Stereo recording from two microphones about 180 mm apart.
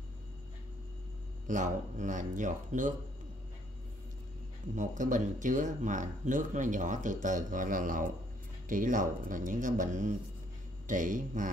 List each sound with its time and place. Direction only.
1.5 s speech: 45° right (ahead or behind)
4.7 s speech: 45° right (ahead or behind)